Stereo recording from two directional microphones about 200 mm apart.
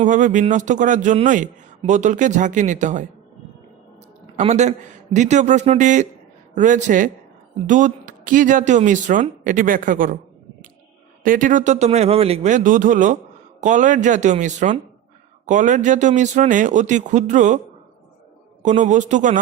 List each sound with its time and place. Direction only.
0.0 s speech: 40° right (ahead or behind)
4.4 s speech: 35° right (ahead or behind)
11.2 s speech: 40° right (ahead or behind)
18.6 s speech: 35° right (ahead or behind)